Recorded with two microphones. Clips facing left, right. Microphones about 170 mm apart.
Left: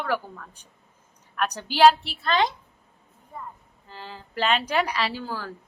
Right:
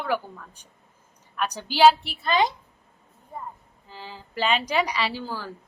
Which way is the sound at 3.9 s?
5° right (ahead or behind).